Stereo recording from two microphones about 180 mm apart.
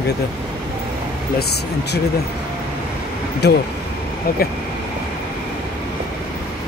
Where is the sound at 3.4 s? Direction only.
70° left (ahead or behind).